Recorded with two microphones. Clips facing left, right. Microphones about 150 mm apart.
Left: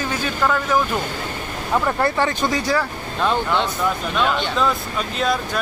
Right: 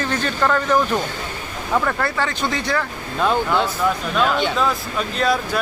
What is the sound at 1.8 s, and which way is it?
Speech, 20° left (ahead or behind).